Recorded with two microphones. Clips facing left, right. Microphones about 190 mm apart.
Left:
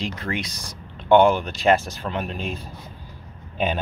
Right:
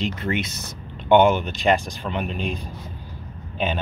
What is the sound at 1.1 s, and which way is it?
Speech, 5° right (ahead or behind).